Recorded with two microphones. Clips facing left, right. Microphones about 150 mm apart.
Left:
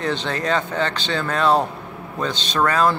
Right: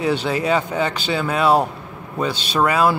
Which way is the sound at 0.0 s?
10° right (ahead or behind).